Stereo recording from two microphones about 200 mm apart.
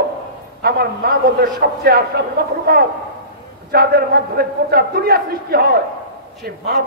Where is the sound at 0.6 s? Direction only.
50° right (ahead or behind).